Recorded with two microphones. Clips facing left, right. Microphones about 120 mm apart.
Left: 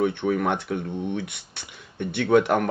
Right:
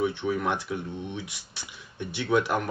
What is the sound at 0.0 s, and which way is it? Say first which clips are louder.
Speech: left 4 dB; 55° left (ahead or behind).